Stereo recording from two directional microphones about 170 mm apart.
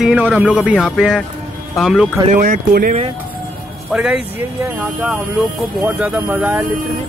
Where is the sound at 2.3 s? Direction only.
50° right (ahead or behind).